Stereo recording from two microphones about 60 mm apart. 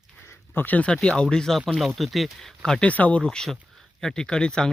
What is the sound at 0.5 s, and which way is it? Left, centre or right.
Speech, left.